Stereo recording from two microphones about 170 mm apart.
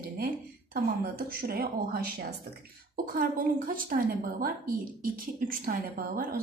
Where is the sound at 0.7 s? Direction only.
60° right (ahead or behind).